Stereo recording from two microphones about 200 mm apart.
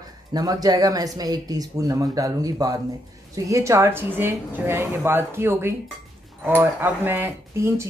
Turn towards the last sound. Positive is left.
turn(degrees=-15)  # may be behind; listen again after turning